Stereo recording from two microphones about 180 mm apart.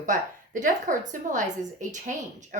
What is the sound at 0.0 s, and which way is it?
A woman's voice, 45° right (ahead or behind).